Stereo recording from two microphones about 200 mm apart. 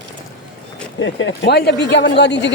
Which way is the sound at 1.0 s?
70° left (ahead or behind).